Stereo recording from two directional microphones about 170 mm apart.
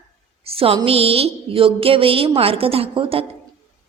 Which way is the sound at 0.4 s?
35° right (ahead or behind).